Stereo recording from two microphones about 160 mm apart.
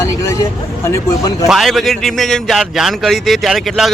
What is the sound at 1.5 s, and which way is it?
A man's voice, centre (ahead or behind).